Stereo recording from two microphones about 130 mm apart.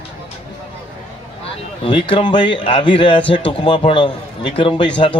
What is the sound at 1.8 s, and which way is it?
A man's voice, 40° left (ahead or behind).